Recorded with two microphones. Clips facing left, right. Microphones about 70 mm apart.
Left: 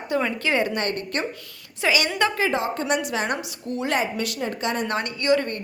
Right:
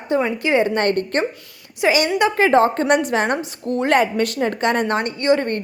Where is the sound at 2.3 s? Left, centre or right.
Right.